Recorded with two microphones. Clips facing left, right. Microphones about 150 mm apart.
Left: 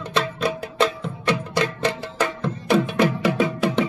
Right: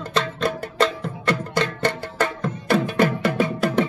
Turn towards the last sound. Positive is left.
turn(degrees=0)  # may be behind; listen again after turning